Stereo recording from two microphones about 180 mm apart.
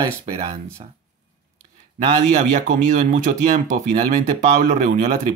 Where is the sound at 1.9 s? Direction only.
45° right (ahead or behind).